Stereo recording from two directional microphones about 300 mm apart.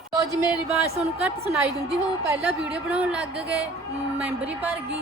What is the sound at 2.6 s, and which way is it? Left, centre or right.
A woman's voice, centre.